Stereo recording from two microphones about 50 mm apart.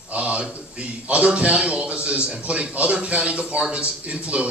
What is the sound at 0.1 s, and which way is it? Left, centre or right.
A man's voice, right.